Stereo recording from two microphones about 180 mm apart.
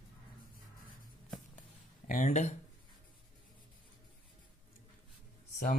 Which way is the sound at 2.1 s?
45° left (ahead or behind).